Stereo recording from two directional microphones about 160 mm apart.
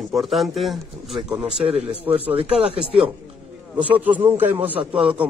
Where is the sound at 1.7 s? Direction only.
35° right (ahead or behind).